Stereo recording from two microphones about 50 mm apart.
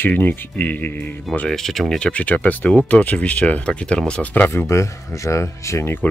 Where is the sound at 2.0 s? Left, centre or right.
Centre.